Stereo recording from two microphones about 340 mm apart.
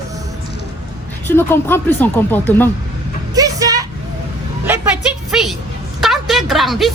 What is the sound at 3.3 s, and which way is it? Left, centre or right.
Vehicle, centre.